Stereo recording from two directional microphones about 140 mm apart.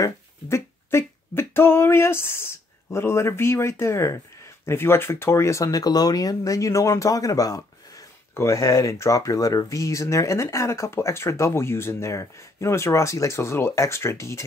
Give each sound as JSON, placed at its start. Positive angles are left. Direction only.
{"t": 0.0, "sound": "speech", "side_deg": 20}